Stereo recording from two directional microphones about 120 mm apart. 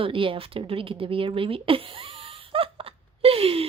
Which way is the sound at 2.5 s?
50° right (ahead or behind).